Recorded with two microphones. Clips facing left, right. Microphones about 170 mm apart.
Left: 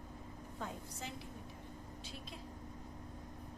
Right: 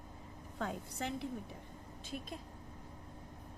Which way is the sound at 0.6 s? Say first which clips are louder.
Right 6 dB; 70° right (ahead or behind).